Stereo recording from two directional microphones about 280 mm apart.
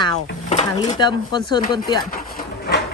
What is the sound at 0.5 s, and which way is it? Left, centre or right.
Speech, centre.